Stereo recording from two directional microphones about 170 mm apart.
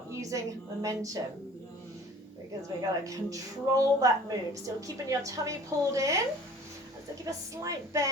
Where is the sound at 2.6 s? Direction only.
20° right (ahead or behind).